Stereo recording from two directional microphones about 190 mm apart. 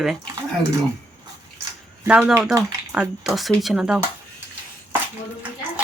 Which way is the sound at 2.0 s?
5° right (ahead or behind).